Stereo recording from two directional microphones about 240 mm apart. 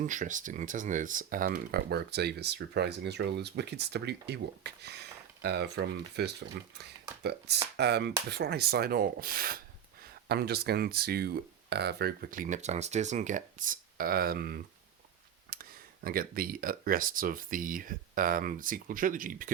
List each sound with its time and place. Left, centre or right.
0.0 s speech: right
15.5 s a sound: right
16.0 s speech: right